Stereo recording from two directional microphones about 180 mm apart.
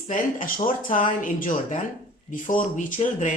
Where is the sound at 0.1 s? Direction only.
50° left (ahead or behind).